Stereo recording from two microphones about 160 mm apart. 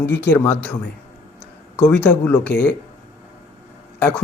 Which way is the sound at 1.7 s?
10° left (ahead or behind).